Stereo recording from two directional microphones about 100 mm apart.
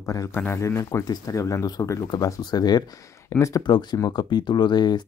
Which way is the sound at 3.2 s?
30° left (ahead or behind).